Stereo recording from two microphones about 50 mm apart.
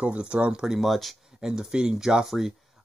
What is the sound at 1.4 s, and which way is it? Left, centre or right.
Speech, centre.